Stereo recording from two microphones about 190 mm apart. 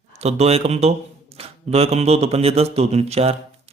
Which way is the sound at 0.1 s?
35° right (ahead or behind).